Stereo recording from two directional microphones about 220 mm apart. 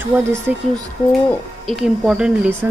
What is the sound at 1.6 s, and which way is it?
A woman's voice, centre (ahead or behind).